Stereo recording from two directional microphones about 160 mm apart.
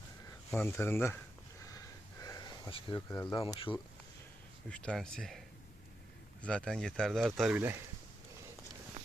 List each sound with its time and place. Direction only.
0.5 s speech: 10° left (ahead or behind)
1.6 s snort: 20° left (ahead or behind)
2.6 s speech: 30° left (ahead or behind)
3.2 s speech: 15° left (ahead or behind)
4.7 s speech: 5° left (ahead or behind)
6.4 s speech: 5° left (ahead or behind)